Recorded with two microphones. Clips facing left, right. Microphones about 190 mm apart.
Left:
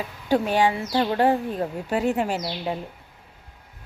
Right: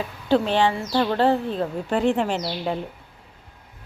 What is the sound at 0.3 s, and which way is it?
Speech, 10° left (ahead or behind).